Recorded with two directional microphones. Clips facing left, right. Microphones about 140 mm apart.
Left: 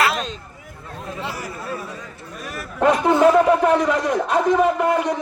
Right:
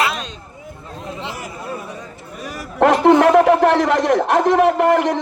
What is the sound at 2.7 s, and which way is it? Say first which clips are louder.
A man's voice: right 5 dB; 90° right.